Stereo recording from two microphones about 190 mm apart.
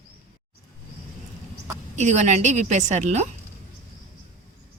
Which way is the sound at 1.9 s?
35° right (ahead or behind).